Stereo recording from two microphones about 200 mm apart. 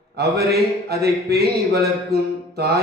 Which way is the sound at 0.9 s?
55° right (ahead or behind).